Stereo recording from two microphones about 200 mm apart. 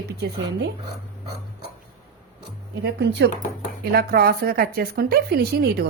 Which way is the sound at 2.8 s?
55° right (ahead or behind).